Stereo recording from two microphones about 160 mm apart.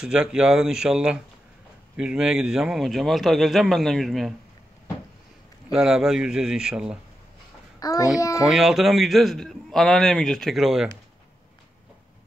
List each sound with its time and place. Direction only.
0.0 s a man's voice: 5° right (ahead or behind)
5.7 s a man's voice: 5° right (ahead or behind)
7.8 s a child's voice: 20° left (ahead or behind)
8.5 s a man's voice: centre (ahead or behind)